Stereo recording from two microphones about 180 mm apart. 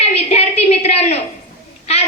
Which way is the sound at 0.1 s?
35° left (ahead or behind).